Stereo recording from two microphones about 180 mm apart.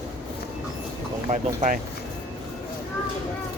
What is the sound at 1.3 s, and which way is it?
Speech, 40° right (ahead or behind).